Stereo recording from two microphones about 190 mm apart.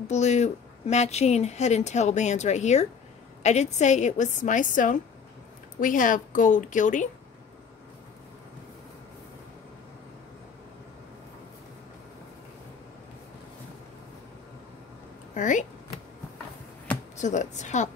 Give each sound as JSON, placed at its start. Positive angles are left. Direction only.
{"t": 0.1, "sound": "a woman's voice", "side_deg": 35}
{"t": 15.3, "sound": "a sound", "side_deg": 40}
{"t": 17.2, "sound": "speech", "side_deg": 40}